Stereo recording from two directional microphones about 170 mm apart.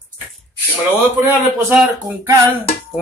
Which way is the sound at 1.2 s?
10° right (ahead or behind).